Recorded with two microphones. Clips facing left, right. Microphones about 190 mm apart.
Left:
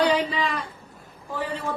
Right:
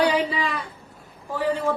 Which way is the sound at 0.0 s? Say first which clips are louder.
Right 1 dB; 10° right (ahead or behind).